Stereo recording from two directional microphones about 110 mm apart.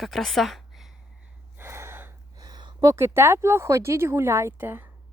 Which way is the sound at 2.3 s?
40° right (ahead or behind).